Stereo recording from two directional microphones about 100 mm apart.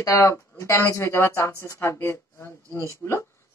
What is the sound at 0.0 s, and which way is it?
Speech, 30° left (ahead or behind).